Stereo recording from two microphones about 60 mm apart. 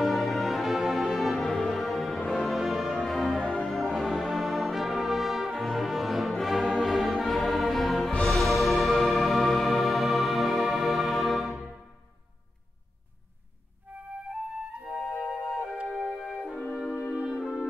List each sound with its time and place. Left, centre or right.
0.0 s music: centre
3.4 s brass instrument: centre
8.3 s music: centre
14.9 s music: left
15.4 s music: centre
16.5 s brass instrument: left
17.3 s music: centre